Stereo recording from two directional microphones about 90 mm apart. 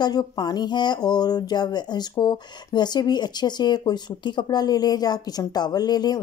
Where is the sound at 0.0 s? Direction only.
50° left (ahead or behind).